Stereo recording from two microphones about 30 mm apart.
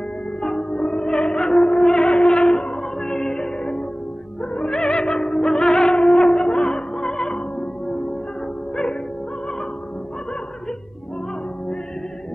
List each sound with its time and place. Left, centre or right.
0.6 s music: left
4.6 s music: left
5.2 s music: centre